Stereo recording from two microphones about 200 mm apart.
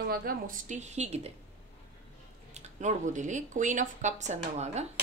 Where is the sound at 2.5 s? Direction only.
35° right (ahead or behind).